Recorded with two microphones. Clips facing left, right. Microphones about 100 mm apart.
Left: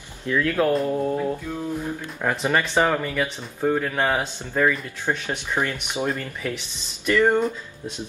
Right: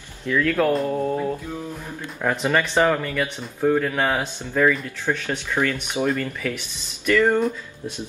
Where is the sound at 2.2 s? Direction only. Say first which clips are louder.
Right 2 dB; 10° left (ahead or behind).